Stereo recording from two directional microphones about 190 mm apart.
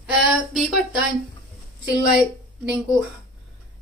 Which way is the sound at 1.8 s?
5° right (ahead or behind).